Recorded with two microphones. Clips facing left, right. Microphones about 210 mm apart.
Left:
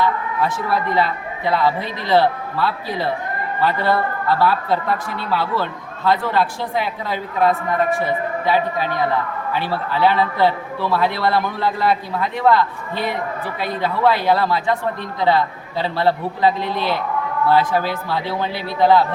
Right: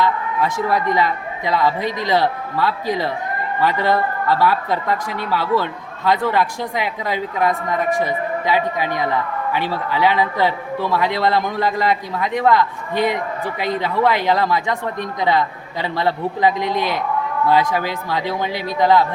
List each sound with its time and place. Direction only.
0.7 s a man's voice: 15° right (ahead or behind)